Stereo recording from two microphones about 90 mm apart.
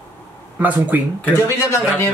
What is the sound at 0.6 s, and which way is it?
Speech, 20° right (ahead or behind).